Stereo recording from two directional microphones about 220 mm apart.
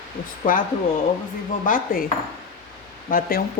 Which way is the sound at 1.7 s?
40° left (ahead or behind).